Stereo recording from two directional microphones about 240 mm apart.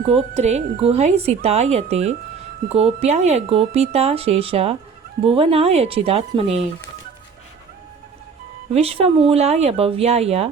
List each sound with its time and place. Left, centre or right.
0.0 s speech: right
8.7 s speech: right